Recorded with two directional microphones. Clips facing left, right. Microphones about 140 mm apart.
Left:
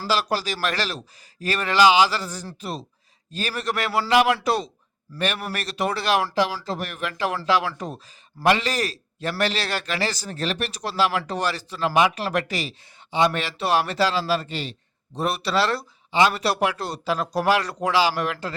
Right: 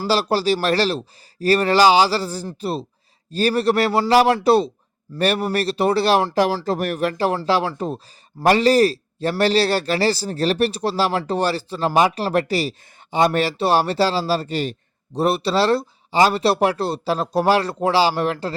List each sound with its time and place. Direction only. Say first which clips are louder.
0.1 s speech: right 6 dB; 30° right (ahead or behind)
6.3 s speech: right 5 dB; 45° right (ahead or behind)
15.1 s speech: right 5 dB; 30° right (ahead or behind)